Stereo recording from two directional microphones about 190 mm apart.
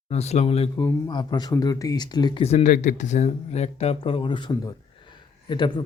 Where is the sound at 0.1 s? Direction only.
35° left (ahead or behind).